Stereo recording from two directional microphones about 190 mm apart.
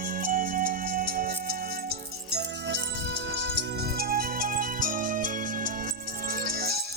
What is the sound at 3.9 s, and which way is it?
Music, 50° right (ahead or behind).